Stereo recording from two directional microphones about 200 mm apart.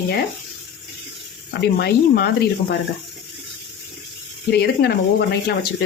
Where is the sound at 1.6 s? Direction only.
55° left (ahead or behind).